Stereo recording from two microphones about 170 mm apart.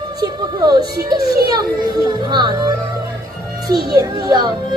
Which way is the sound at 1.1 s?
20° right (ahead or behind).